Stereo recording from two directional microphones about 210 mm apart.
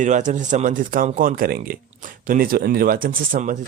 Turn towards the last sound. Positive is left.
turn(degrees=-40)  # may be behind; listen again after turning